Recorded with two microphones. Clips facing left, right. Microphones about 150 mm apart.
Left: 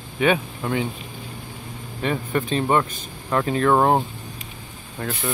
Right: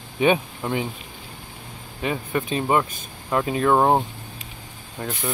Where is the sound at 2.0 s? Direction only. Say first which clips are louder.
Left 1 dB; 10° right (ahead or behind).